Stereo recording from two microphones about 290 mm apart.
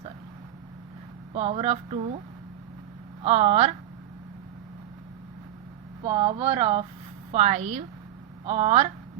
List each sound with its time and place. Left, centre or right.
1.3 s speech: centre
3.2 s speech: right
6.0 s a woman's voice: centre